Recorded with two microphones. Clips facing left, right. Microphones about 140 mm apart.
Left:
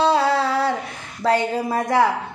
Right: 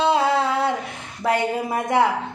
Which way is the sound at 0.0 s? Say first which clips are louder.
Left 1 dB; 20° right (ahead or behind).